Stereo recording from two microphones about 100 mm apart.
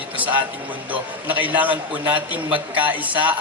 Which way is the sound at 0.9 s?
15° right (ahead or behind).